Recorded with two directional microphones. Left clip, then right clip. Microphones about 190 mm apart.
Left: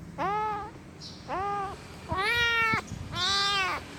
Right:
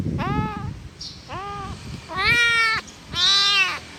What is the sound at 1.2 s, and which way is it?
Crow, 15° left (ahead or behind).